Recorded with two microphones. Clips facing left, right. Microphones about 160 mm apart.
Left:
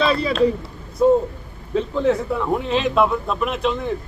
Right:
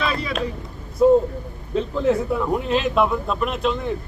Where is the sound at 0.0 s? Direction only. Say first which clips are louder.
Left 6 dB; 30° left (ahead or behind).